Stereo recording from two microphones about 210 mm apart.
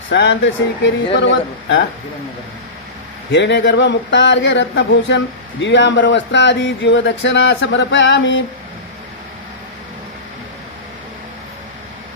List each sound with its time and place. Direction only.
0.1 s speech: 60° left (ahead or behind)
3.3 s speech: 55° left (ahead or behind)